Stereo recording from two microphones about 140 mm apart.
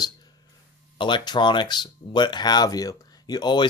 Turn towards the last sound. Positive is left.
turn(degrees=30)  # may be behind; listen again after turning